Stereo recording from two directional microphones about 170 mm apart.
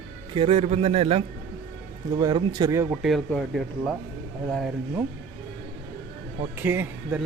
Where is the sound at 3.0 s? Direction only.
Centre (ahead or behind).